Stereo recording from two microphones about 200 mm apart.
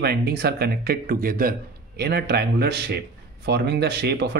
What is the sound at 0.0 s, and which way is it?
Speech, 55° right (ahead or behind).